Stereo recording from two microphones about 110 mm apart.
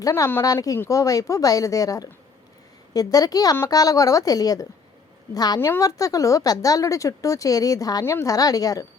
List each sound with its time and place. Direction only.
0.0 s speech: 30° left (ahead or behind)
5.5 s speech: 25° left (ahead or behind)